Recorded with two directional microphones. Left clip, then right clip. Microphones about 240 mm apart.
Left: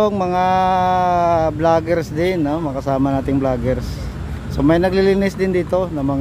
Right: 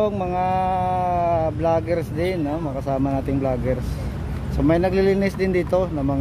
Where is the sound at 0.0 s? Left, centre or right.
Left.